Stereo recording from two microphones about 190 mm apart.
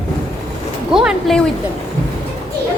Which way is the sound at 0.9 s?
5° right (ahead or behind).